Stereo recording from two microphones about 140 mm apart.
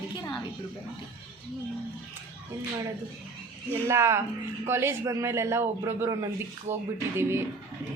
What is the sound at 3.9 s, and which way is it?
A man's voice, 20° right (ahead or behind).